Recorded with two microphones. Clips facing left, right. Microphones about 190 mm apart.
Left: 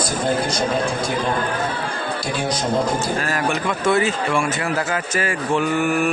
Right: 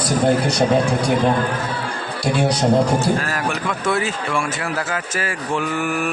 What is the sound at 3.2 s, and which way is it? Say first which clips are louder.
Speech: left 1 dB; centre (ahead or behind).